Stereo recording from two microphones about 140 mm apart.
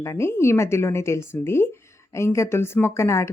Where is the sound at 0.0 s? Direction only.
20° left (ahead or behind).